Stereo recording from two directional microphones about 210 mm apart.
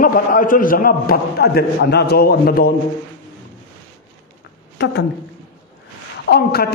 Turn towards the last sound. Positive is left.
turn(degrees=50)  # may be behind; listen again after turning